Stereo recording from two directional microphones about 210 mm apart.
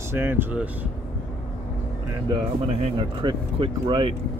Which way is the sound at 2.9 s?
25° right (ahead or behind).